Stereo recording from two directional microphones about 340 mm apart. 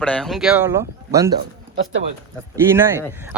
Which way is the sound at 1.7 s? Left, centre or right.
Right.